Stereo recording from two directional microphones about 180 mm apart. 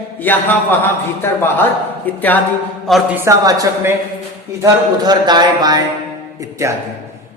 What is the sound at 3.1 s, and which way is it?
Speech, 15° right (ahead or behind).